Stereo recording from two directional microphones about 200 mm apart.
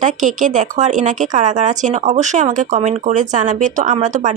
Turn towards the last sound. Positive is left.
turn(degrees=-40)  # may be behind; listen again after turning